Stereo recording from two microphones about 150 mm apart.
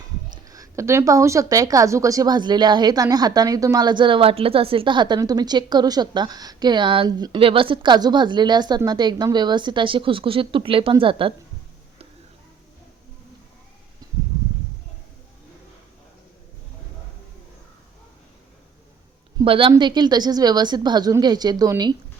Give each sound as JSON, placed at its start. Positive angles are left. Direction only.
{"t": 0.4, "sound": "a woman's voice", "side_deg": -20}
{"t": 19.4, "sound": "a woman's voice", "side_deg": -35}